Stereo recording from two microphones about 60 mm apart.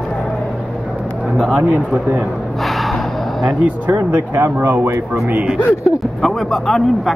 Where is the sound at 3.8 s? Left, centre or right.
Right.